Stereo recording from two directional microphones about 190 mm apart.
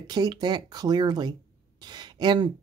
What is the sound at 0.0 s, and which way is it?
Speech, 20° right (ahead or behind).